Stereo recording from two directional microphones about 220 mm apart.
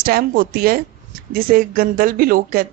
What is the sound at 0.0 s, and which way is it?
Speech, 40° right (ahead or behind).